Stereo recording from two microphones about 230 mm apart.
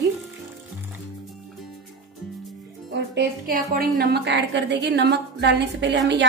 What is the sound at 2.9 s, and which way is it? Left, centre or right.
A woman's voice, right.